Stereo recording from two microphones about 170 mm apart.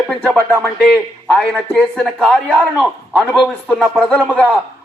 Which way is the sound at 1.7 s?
10° left (ahead or behind).